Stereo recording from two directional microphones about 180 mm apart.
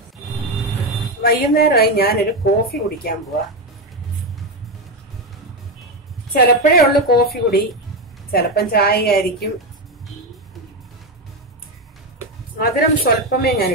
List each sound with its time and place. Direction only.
1.2 s a woman's voice: 60° left (ahead or behind)
6.3 s a woman's voice: 60° left (ahead or behind)
12.5 s a woman's voice: 60° left (ahead or behind)